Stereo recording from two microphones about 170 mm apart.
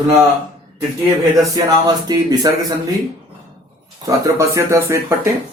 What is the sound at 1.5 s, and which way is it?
A man's voice, 25° right (ahead or behind).